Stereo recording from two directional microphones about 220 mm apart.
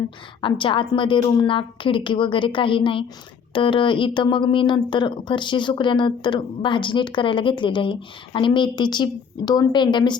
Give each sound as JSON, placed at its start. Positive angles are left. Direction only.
{"t": 0.4, "sound": "speech", "side_deg": 25}